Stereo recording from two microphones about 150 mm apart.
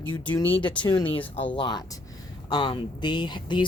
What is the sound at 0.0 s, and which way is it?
Speech, 10° left (ahead or behind).